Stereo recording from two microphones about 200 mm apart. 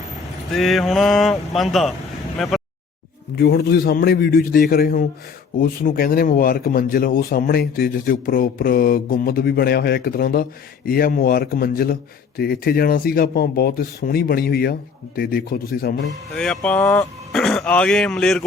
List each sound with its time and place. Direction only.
0.5 s speech: centre (ahead or behind)
3.3 s speech: 55° left (ahead or behind)
16.4 s speech: 5° left (ahead or behind)